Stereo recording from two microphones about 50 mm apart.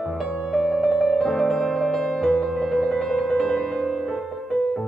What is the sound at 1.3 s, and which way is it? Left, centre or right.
Music, centre.